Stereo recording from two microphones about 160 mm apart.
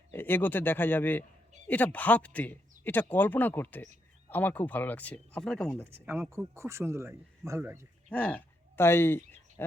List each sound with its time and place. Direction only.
0.1 s speech: 10° left (ahead or behind)
6.1 s speech: 15° right (ahead or behind)
8.1 s a sound: 10° left (ahead or behind)